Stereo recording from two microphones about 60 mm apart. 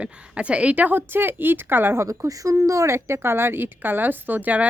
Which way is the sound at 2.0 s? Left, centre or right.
Right.